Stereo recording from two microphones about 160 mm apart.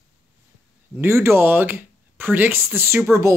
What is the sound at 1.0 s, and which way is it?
Speech, 15° right (ahead or behind).